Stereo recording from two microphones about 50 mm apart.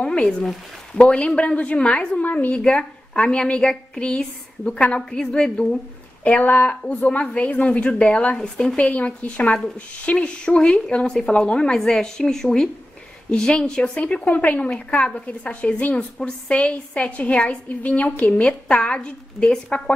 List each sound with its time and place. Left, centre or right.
0.2 s a woman's voice: centre
2.2 s speech: left
2.5 s a woman's voice: centre
6.4 s speech: left
6.9 s a woman's voice: left
8.4 s a woman's voice: centre
8.7 s a woman's voice: left